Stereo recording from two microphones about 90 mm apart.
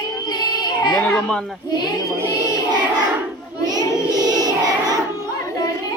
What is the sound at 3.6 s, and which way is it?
Child singing, 50° right (ahead or behind).